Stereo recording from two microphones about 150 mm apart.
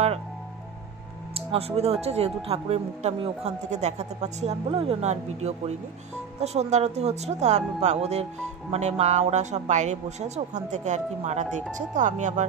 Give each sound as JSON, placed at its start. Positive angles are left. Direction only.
{"t": 1.3, "sound": "speech", "side_deg": -40}